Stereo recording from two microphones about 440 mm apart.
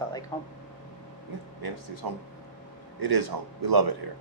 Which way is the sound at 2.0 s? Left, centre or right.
Right.